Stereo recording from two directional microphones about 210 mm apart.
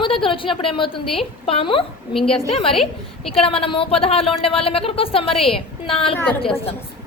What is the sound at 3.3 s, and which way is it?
A woman's voice, 25° left (ahead or behind).